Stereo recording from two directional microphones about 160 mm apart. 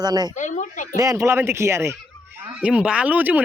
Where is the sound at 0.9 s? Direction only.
20° right (ahead or behind).